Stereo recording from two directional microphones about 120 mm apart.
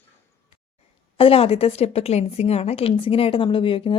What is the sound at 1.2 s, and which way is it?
A woman's voice, 55° left (ahead or behind).